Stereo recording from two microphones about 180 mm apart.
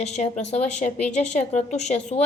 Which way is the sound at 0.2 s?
40° left (ahead or behind).